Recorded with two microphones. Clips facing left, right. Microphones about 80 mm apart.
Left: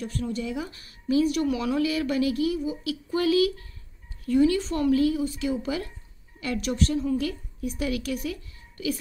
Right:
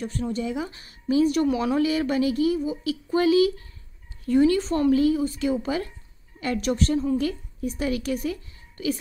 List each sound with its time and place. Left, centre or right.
0.0 s speech: right
4.3 s speech: right